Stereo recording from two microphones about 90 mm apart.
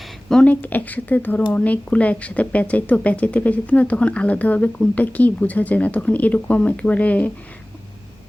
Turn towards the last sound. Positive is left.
turn(degrees=15)  # may be behind; listen again after turning